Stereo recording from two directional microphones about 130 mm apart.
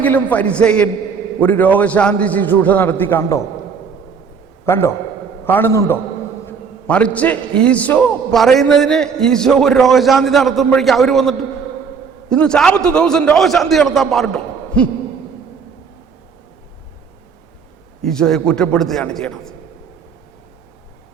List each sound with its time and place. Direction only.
0.0 s a man's voice: 10° left (ahead or behind)
4.6 s a man's voice: 20° left (ahead or behind); by 14.8 s 5° left (ahead or behind)
18.0 s a man's voice: 5° left (ahead or behind)